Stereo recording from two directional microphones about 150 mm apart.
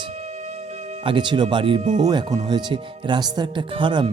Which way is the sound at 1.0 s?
30° right (ahead or behind).